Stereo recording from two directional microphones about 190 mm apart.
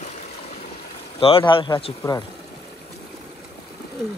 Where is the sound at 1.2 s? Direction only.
25° left (ahead or behind).